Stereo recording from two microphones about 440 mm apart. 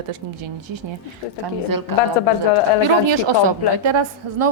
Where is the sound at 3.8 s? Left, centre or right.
Right.